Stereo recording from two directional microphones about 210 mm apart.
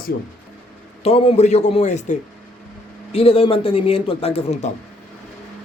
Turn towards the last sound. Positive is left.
turn(degrees=30)  # may be behind; listen again after turning